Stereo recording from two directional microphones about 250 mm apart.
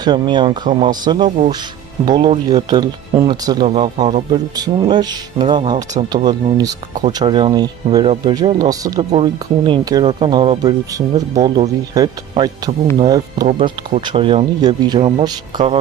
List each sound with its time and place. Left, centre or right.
0.0 s speech: centre